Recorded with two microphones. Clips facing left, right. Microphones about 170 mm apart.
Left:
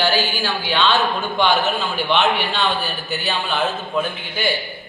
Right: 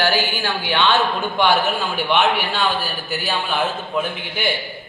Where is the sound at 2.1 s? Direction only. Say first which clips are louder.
Even; 10° right (ahead or behind).